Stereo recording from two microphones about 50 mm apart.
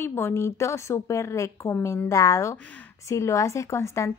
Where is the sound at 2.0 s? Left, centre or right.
Left.